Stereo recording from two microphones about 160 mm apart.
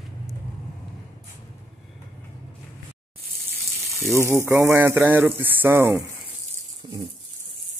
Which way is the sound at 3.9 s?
Centre (ahead or behind).